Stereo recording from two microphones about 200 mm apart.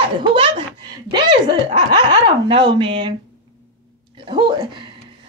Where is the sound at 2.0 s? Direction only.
25° right (ahead or behind).